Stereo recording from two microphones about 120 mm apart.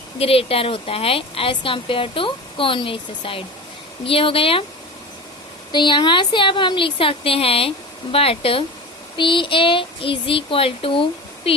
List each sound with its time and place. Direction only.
0.2 s speech: 55° left (ahead or behind)
5.7 s speech: 40° left (ahead or behind)